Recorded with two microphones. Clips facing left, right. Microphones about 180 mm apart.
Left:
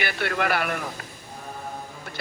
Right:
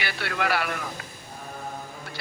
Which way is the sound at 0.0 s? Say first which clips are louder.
Left 3 dB; 50° left (ahead or behind).